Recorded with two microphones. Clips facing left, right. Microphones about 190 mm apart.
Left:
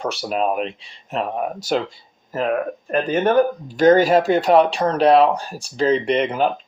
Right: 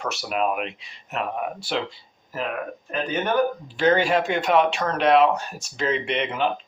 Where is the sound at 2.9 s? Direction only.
45° left (ahead or behind).